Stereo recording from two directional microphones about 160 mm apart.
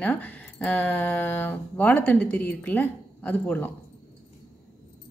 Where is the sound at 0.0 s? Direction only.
10° left (ahead or behind).